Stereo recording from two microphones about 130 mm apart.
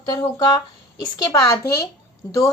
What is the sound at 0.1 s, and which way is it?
Speech, 30° left (ahead or behind).